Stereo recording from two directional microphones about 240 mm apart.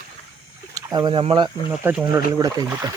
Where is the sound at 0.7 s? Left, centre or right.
Centre.